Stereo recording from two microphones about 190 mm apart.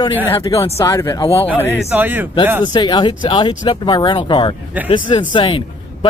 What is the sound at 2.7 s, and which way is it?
Speech, 25° left (ahead or behind).